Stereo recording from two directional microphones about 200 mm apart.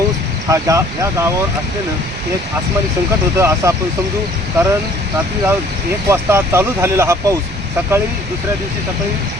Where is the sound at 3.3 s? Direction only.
15° right (ahead or behind).